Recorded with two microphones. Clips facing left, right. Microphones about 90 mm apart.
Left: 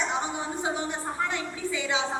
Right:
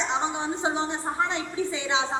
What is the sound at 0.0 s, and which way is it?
A woman's voice, 20° right (ahead or behind).